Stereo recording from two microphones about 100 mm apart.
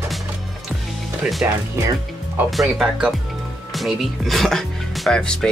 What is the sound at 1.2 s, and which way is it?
Speech, 5° right (ahead or behind).